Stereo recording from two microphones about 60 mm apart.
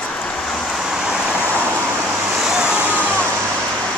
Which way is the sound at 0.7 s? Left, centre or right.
Centre.